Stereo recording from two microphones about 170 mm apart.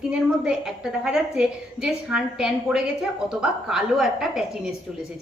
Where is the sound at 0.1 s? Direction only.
5° right (ahead or behind).